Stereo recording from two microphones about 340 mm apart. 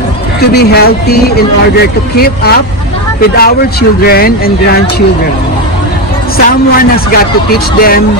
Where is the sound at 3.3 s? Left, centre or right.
Left.